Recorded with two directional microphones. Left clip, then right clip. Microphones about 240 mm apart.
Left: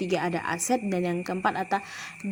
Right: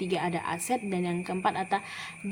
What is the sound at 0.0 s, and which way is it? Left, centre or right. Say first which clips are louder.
A woman's voice: left 3 dB; centre.